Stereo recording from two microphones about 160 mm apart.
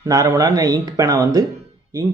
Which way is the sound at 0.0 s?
20° right (ahead or behind).